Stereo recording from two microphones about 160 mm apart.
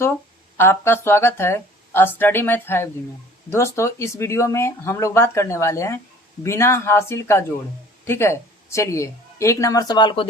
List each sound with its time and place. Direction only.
0.5 s speech: 15° left (ahead or behind)